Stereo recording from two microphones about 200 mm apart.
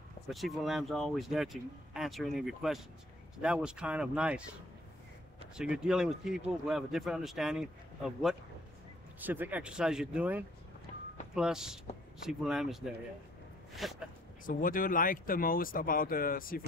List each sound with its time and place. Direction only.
0.3 s speech: centre (ahead or behind)
5.6 s speech: 5° right (ahead or behind)
14.4 s speech: 45° left (ahead or behind)